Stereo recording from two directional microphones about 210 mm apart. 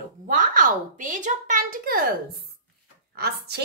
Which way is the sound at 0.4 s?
40° right (ahead or behind).